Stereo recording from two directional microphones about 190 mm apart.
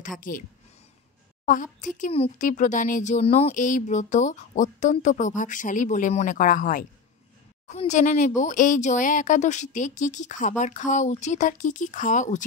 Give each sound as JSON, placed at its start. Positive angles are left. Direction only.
{"t": 0.3, "sound": "speech", "side_deg": 45}